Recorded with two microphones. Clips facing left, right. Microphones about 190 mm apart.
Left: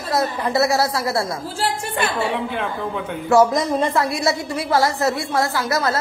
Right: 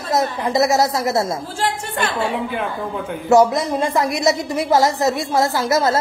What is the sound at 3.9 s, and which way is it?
A woman's voice, 20° right (ahead or behind).